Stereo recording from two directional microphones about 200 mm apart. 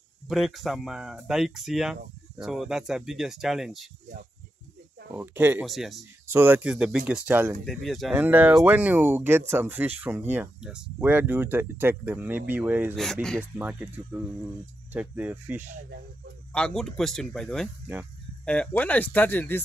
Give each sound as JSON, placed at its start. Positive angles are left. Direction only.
{"t": 0.3, "sound": "speech", "side_deg": 0}
{"t": 5.1, "sound": "speech", "side_deg": -10}
{"t": 6.2, "sound": "speech", "side_deg": -10}
{"t": 12.9, "sound": "speech", "side_deg": 0}
{"t": 13.6, "sound": "speech", "side_deg": -10}
{"t": 16.5, "sound": "speech", "side_deg": 5}